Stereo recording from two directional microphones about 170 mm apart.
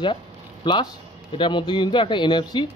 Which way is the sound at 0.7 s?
25° left (ahead or behind).